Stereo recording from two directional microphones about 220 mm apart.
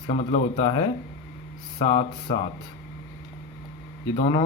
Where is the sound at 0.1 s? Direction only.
25° left (ahead or behind).